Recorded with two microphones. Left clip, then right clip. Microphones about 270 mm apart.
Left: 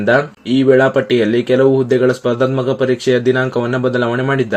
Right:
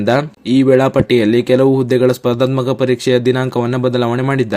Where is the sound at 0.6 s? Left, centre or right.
Right.